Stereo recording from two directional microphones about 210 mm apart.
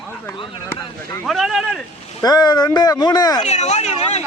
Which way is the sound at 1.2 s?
Centre (ahead or behind).